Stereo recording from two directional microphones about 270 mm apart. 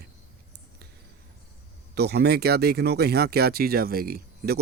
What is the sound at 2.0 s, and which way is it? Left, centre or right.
Speech, right.